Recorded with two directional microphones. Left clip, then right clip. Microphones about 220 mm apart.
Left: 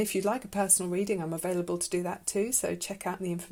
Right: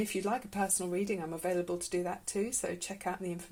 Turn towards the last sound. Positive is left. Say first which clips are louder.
# left 3 dB
turn(degrees=45)  # may be behind; listen again after turning